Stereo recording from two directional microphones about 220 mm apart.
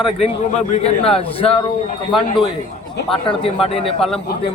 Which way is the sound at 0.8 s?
25° left (ahead or behind).